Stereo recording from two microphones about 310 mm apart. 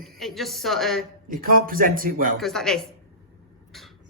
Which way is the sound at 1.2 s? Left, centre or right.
Right.